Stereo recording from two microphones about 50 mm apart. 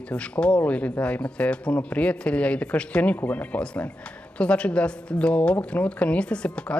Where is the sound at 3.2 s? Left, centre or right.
Left.